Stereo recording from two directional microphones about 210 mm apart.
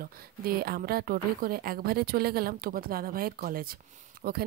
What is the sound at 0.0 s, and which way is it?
A woman's voice, 45° right (ahead or behind).